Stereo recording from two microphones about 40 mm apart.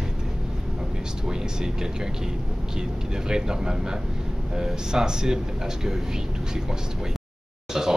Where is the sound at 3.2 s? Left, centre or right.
Centre.